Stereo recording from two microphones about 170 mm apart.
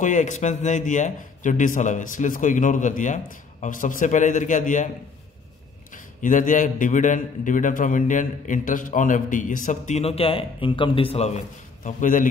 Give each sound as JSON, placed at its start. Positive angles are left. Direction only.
{"t": 0.0, "sound": "a man's voice", "side_deg": 45}
{"t": 6.2, "sound": "a man's voice", "side_deg": 50}